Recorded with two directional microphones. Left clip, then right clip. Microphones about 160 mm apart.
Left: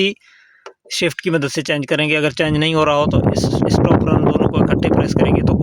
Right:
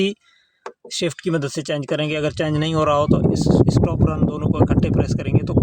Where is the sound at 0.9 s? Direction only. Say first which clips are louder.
Left 5 dB; 20° left (ahead or behind).